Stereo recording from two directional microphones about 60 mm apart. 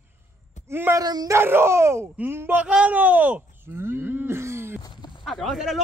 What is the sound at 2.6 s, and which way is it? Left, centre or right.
Speech, right.